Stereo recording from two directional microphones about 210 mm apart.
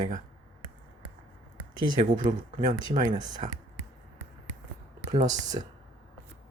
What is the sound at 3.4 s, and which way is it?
Speech, 30° right (ahead or behind).